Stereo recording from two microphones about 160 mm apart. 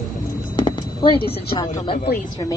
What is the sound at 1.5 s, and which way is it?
Speech, 30° left (ahead or behind).